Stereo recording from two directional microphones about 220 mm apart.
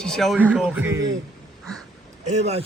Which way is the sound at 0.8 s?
15° right (ahead or behind).